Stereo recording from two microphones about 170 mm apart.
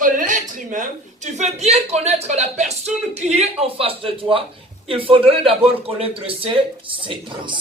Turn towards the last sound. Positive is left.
turn(degrees=-30)  # may be behind; listen again after turning